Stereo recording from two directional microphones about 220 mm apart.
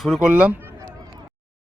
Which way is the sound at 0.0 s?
Centre (ahead or behind).